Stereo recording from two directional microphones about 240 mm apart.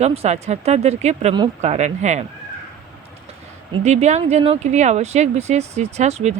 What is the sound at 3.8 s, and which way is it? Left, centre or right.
Speech, right.